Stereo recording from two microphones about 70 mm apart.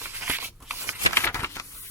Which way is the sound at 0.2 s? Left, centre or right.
Right.